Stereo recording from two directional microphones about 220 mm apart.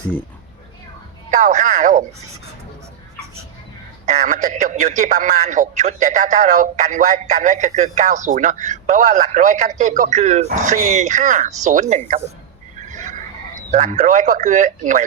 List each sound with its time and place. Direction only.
1.3 s speech: 35° right (ahead or behind)
4.0 s a man's voice: 30° right (ahead or behind)
12.9 s a sound: 35° right (ahead or behind)
13.7 s a man's voice: 30° right (ahead or behind)